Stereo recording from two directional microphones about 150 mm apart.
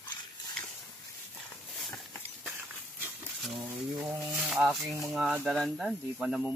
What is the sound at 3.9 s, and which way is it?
Rub, 5° right (ahead or behind).